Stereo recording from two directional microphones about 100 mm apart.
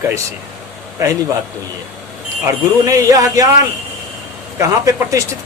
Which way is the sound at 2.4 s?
35° right (ahead or behind).